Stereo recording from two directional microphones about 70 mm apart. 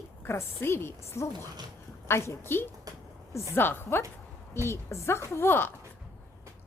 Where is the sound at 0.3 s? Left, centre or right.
Left.